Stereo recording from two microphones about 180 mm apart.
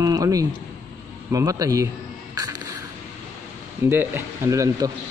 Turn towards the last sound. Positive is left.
turn(degrees=-20)  # may be behind; listen again after turning